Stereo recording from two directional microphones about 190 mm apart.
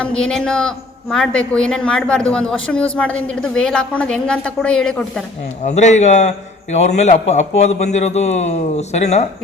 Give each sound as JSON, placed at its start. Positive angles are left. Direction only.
{"t": 0.0, "sound": "a woman's voice", "side_deg": 5}
{"t": 5.6, "sound": "a man's voice", "side_deg": 40}